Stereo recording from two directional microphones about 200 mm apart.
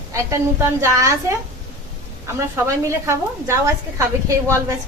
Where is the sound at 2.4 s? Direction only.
15° right (ahead or behind).